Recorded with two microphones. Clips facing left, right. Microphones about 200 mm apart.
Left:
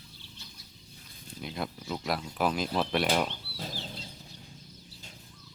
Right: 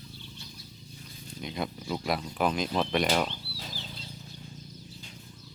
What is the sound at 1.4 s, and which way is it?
Speech, centre (ahead or behind).